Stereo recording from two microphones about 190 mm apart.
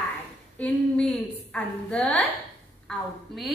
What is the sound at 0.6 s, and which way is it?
A woman's voice, 5° left (ahead or behind).